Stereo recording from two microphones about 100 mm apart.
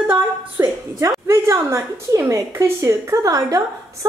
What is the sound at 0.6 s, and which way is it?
A woman's voice, 30° right (ahead or behind).